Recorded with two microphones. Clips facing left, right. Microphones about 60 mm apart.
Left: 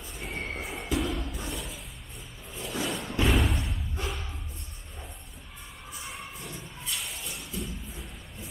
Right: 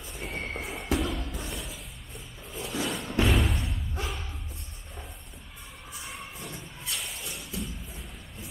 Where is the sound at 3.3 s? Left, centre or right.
Centre.